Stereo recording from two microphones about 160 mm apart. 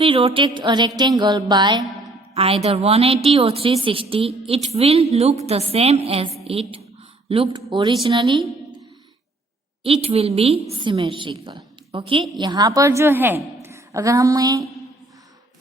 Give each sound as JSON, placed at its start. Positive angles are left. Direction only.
{"t": 0.0, "sound": "a woman's voice", "side_deg": -35}
{"t": 2.3, "sound": "a woman's voice", "side_deg": -40}
{"t": 9.8, "sound": "a woman's voice", "side_deg": -35}